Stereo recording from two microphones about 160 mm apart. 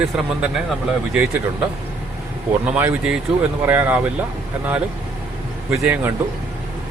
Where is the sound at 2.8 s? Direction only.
10° right (ahead or behind).